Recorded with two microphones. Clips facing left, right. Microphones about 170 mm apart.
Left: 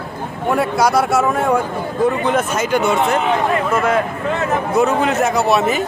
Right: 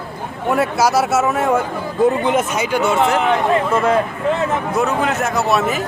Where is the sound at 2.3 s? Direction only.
15° right (ahead or behind).